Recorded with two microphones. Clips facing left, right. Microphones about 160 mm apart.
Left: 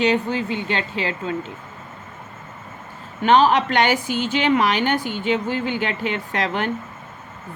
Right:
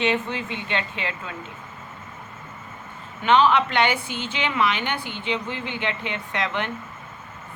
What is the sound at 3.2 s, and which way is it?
A woman's voice, 40° left (ahead or behind).